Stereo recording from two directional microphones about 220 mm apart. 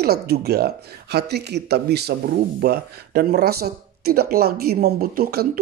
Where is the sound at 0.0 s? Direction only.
45° right (ahead or behind).